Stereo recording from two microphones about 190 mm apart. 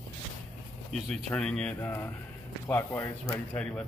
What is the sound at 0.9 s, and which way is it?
Speech, 5° left (ahead or behind).